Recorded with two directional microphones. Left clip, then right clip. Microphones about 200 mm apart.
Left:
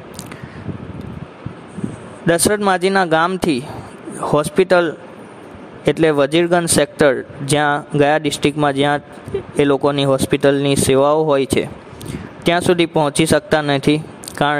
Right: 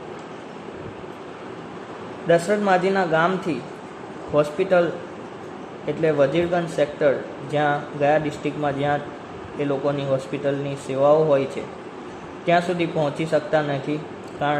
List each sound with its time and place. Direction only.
2.2 s speech: 55° left (ahead or behind)
5.9 s speech: 60° left (ahead or behind)